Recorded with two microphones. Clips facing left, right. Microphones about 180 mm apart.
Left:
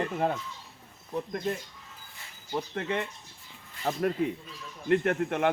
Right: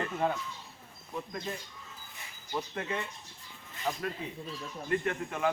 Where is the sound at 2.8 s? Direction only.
65° left (ahead or behind).